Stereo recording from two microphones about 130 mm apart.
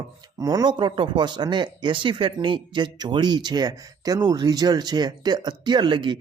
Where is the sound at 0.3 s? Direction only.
25° right (ahead or behind).